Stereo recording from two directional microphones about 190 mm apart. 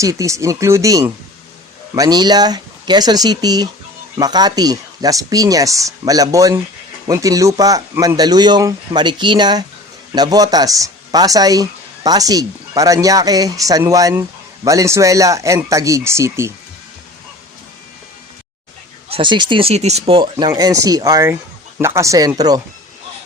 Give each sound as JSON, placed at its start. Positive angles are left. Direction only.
{"t": 0.0, "sound": "speech", "side_deg": -15}
{"t": 19.1, "sound": "speech", "side_deg": -25}
{"t": 20.3, "sound": "speech", "side_deg": -20}